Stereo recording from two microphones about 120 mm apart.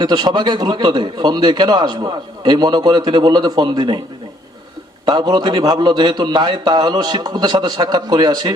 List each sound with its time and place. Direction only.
0.0 s a man's voice: 35° right (ahead or behind)
5.0 s a man's voice: 35° right (ahead or behind)